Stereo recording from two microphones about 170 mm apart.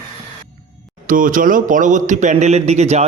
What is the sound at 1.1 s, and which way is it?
A man's voice, 55° right (ahead or behind).